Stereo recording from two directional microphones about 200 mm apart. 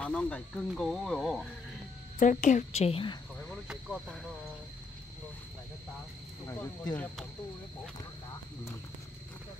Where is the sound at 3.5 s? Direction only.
Centre (ahead or behind).